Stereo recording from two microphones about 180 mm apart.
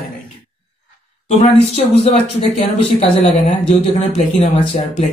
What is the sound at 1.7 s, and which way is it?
Speech, 35° left (ahead or behind).